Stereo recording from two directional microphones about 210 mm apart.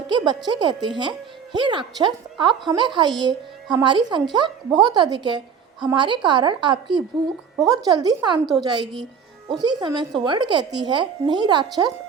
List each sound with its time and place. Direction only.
0.4 s a woman's voice: 20° right (ahead or behind)